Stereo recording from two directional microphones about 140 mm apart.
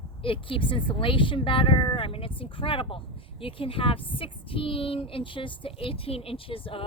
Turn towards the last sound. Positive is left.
turn(degrees=40)  # may be behind; listen again after turning